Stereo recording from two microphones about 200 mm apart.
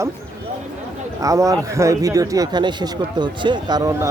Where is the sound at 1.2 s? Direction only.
15° right (ahead or behind).